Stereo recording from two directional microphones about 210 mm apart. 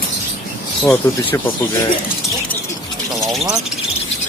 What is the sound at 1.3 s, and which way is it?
Speech, 15° left (ahead or behind).